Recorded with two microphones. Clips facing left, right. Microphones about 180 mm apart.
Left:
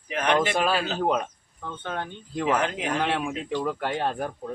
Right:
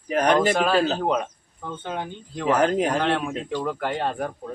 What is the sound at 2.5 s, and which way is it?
Speech, 40° right (ahead or behind).